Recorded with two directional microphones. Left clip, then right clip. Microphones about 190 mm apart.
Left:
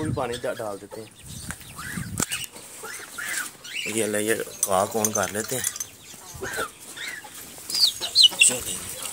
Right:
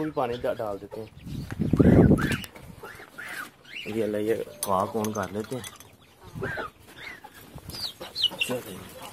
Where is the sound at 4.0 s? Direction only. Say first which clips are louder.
Left 1 dB; centre (ahead or behind).